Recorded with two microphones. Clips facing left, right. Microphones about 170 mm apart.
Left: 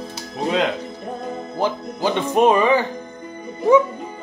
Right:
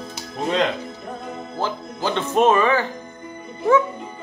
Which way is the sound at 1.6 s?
15° left (ahead or behind).